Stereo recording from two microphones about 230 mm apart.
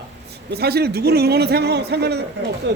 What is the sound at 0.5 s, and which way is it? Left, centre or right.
A man's voice, right.